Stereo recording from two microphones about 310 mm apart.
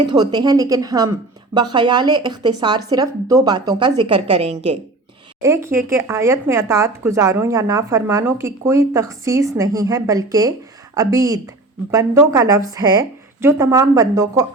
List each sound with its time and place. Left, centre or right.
0.0 s a woman's voice: centre